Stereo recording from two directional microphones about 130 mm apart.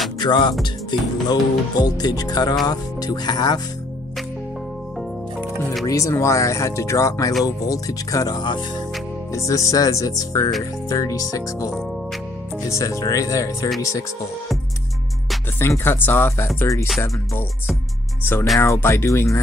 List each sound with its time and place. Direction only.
0.2 s speech: 35° left (ahead or behind)
5.9 s speech: 25° left (ahead or behind)
15.8 s speech: 15° left (ahead or behind)
18.2 s speech: 15° left (ahead or behind)